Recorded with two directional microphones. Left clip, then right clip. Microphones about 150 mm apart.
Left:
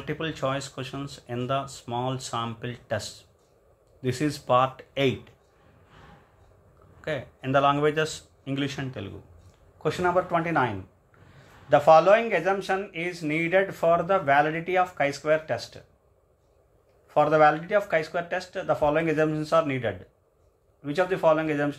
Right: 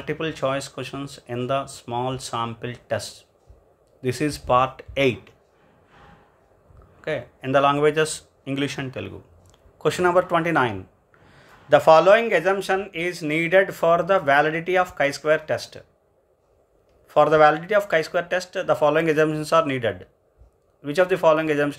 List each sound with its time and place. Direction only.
0.0 s speech: 20° right (ahead or behind)
7.0 s speech: 20° right (ahead or behind)
9.8 s speech: 55° right (ahead or behind); by 15.8 s 35° right (ahead or behind)
17.1 s speech: 40° right (ahead or behind)